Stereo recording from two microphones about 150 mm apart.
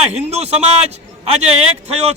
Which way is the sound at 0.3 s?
45° right (ahead or behind).